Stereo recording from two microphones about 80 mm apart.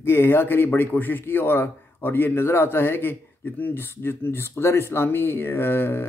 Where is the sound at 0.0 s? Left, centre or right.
Left.